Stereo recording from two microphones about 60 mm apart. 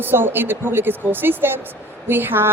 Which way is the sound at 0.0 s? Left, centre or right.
Right.